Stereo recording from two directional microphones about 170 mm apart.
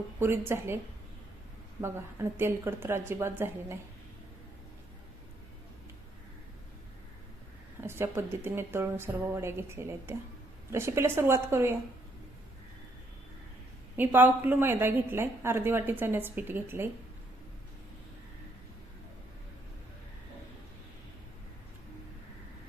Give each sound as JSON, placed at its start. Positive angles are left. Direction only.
{"t": 0.2, "sound": "a woman's voice", "side_deg": -15}
{"t": 1.8, "sound": "a woman's voice", "side_deg": -15}
{"t": 7.8, "sound": "a woman's voice", "side_deg": -15}
{"t": 13.9, "sound": "a woman's voice", "side_deg": -10}